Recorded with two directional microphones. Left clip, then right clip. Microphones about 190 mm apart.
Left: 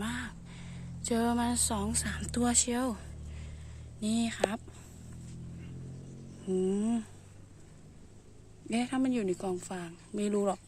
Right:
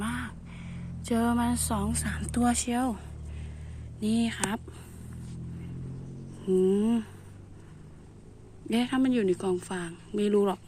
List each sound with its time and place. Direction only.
0.0 s a sound: 20° left (ahead or behind)
4.0 s a woman's voice: 20° left (ahead or behind)
6.4 s a woman's voice: 10° left (ahead or behind)
8.7 s a woman's voice: 10° left (ahead or behind)